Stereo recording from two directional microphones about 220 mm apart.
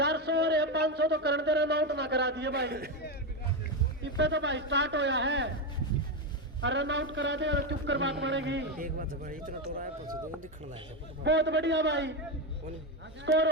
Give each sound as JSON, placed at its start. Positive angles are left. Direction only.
{"t": 0.0, "sound": "speech", "side_deg": -50}
{"t": 4.0, "sound": "speech", "side_deg": -55}
{"t": 6.6, "sound": "a man's voice", "side_deg": -55}
{"t": 8.8, "sound": "speech", "side_deg": -40}
{"t": 11.2, "sound": "speech", "side_deg": -55}
{"t": 13.2, "sound": "speech", "side_deg": -55}